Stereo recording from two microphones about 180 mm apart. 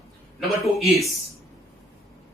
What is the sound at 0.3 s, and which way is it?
Speech, centre (ahead or behind).